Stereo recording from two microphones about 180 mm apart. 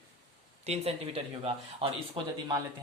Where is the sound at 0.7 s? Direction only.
35° right (ahead or behind).